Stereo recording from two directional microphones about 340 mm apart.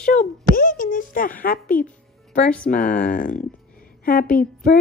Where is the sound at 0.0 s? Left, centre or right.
Left.